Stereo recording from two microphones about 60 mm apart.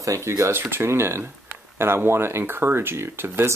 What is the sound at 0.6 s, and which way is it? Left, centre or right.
Speech, right.